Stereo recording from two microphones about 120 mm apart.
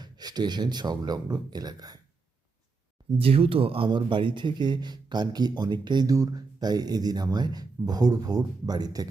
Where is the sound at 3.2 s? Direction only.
50° right (ahead or behind).